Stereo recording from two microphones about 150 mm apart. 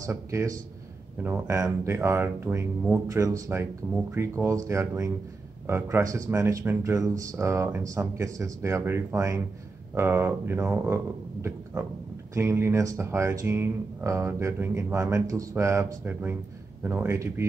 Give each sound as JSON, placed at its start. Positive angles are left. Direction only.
{"t": 0.0, "sound": "speech", "side_deg": -20}
{"t": 12.4, "sound": "speech", "side_deg": -15}